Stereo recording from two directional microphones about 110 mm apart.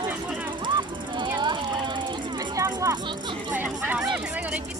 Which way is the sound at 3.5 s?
15° right (ahead or behind).